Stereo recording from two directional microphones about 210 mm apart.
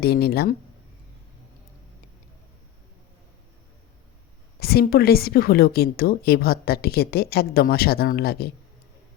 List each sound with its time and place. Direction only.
0.0 s a woman's voice: 50° left (ahead or behind)
4.6 s a woman's voice: 45° left (ahead or behind)